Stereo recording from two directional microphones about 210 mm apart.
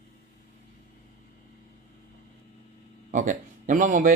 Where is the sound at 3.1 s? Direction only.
35° right (ahead or behind).